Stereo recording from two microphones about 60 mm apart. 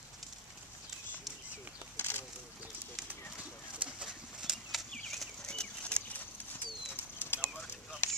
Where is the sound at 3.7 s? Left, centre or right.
Centre.